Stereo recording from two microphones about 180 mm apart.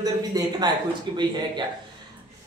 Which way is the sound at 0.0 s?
20° right (ahead or behind).